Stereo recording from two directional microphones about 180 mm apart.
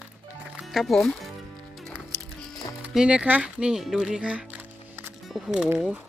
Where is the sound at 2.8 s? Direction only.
5° right (ahead or behind).